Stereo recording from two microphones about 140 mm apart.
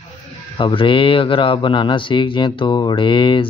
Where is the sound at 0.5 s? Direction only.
35° left (ahead or behind).